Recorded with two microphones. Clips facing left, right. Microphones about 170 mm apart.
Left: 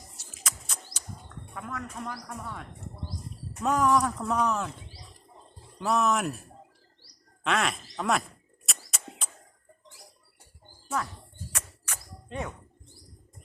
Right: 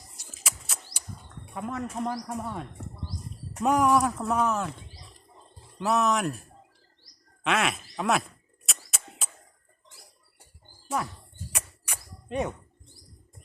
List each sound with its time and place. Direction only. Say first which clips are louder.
0.4 s bird: even; 10° right (ahead or behind)
1.5 s speech: right 6 dB; 25° right (ahead or behind)
3.6 s speech: right 2 dB; 10° right (ahead or behind)
5.8 s speech: right 1 dB; centre (ahead or behind)
7.4 s a sound: right 1 dB; 5° right (ahead or behind)
11.0 s speech: even; 15° right (ahead or behind)
11.5 s a sound: right 2 dB; 15° right (ahead or behind)